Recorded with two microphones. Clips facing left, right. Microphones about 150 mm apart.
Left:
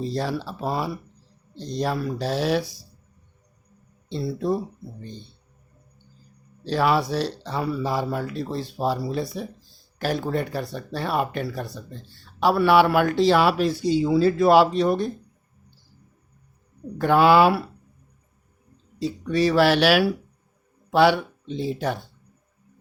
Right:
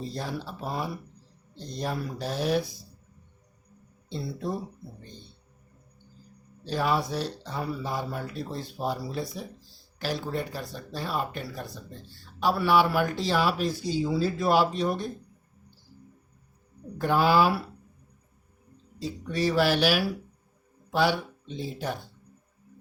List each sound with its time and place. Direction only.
0.0 s speech: 90° left
6.7 s speech: 85° left; by 9.5 s 65° left (ahead or behind)
10.0 s speech: 55° left (ahead or behind); by 15.1 s 70° left (ahead or behind)
17.0 s speech: 70° left (ahead or behind)
18.9 s speech: 70° left (ahead or behind)